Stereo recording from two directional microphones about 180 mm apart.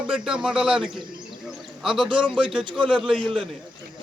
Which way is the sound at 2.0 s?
25° right (ahead or behind).